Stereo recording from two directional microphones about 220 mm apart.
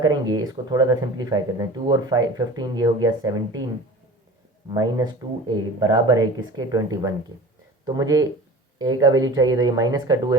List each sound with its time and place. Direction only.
0.0 s speech: 20° right (ahead or behind)
4.7 s speech: 20° right (ahead or behind)